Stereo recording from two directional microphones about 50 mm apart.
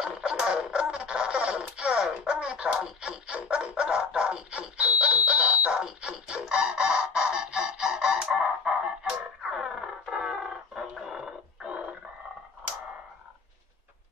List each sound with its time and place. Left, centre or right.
0.0 s music: centre
3.3 s a sound: right
6.1 s music: centre
9.4 s music: centre